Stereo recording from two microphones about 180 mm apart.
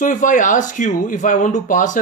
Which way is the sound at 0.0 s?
45° left (ahead or behind).